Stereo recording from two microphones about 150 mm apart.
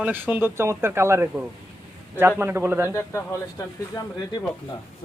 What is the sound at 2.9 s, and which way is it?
Speech, 20° left (ahead or behind).